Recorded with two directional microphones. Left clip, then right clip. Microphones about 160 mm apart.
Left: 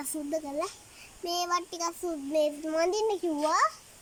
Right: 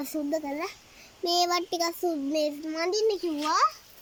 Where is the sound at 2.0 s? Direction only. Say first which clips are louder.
Right 1 dB; centre (ahead or behind).